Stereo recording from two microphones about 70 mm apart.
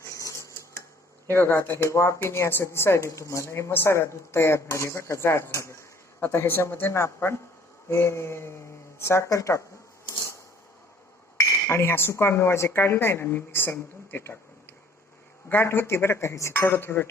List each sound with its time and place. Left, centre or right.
0.0 s dishes: left
1.3 s a woman's voice: left
11.3 s a woman's voice: left
15.4 s a woman's voice: left